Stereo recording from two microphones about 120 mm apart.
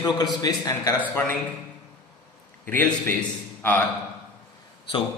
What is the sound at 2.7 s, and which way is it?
Speech, 15° left (ahead or behind).